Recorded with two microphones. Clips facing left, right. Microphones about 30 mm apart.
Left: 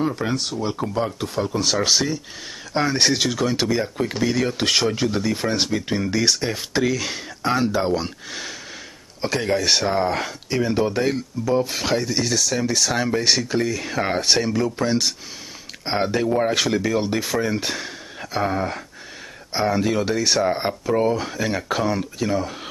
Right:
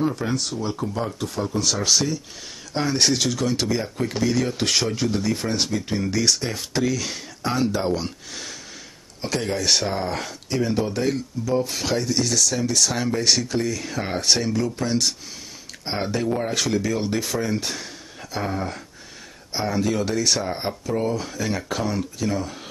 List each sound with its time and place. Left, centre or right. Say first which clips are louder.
0.1 s speech: left 1 dB; left